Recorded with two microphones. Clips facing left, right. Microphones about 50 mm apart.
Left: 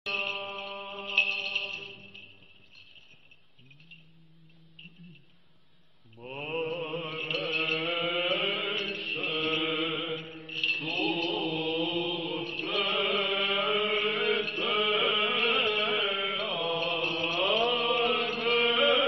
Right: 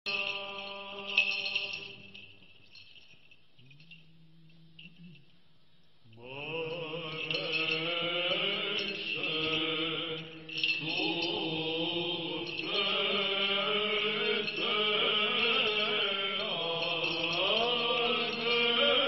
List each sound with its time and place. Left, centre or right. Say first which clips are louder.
0.1 s music: left 3 dB; centre
6.3 s mantra: left 4 dB; centre
7.8 s mantra: left 3 dB; centre
13.3 s chant: left 3 dB; centre
15.0 s music: left 3 dB; centre
15.2 s music: left 3 dB; centre
15.9 s chant: left 3 dB; centre
17.0 s mantra: left 3 dB; centre
17.4 s chant: left 4 dB; centre